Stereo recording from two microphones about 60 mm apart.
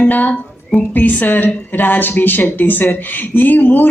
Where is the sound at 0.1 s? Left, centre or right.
Left.